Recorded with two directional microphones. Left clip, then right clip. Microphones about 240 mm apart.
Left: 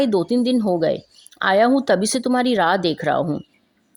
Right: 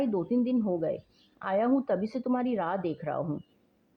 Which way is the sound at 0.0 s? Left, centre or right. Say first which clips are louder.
Left 10 dB; left.